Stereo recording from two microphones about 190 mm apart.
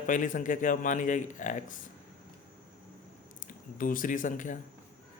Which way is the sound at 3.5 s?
45° left (ahead or behind).